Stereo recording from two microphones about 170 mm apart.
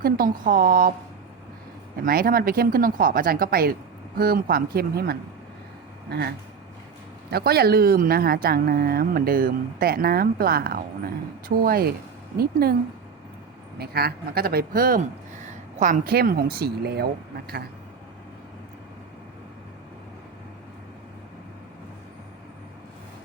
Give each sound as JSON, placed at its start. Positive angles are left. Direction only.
{"t": 0.0, "sound": "speech", "side_deg": -55}
{"t": 2.0, "sound": "speech", "side_deg": -60}
{"t": 13.7, "sound": "speech", "side_deg": -65}